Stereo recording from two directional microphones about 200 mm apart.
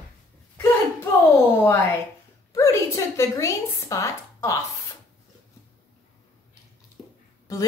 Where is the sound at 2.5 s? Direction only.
15° left (ahead or behind).